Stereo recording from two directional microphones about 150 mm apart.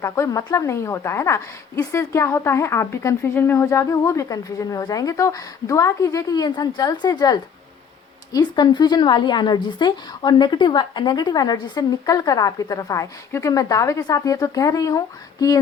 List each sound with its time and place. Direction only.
0.0 s a woman's voice: 20° left (ahead or behind)